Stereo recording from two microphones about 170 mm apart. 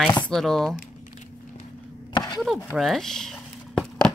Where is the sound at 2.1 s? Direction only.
25° left (ahead or behind).